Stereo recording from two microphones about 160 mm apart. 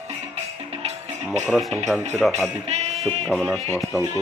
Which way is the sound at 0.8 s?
40° right (ahead or behind).